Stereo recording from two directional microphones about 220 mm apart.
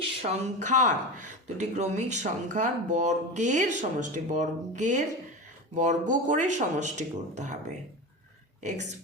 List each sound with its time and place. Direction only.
0.0 s speech: 30° right (ahead or behind)